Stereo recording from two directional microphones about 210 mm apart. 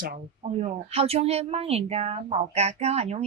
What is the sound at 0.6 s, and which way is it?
Speech, 30° right (ahead or behind).